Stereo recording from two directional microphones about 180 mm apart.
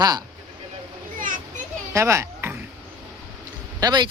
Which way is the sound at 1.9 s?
15° right (ahead or behind).